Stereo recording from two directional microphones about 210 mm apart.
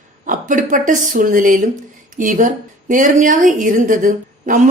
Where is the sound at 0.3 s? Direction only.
40° right (ahead or behind).